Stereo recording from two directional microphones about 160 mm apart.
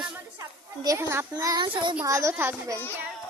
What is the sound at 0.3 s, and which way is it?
A child's voice, 20° right (ahead or behind).